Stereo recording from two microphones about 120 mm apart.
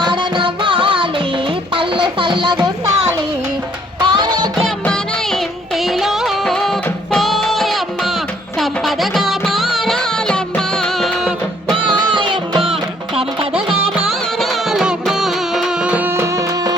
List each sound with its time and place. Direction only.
0.0 s music: 40° right (ahead or behind)
4.0 s music: 40° right (ahead or behind)
4.5 s music: 5° left (ahead or behind)
11.8 s music: 40° right (ahead or behind)
14.3 s music: 5° right (ahead or behind); by 16.3 s 20° right (ahead or behind)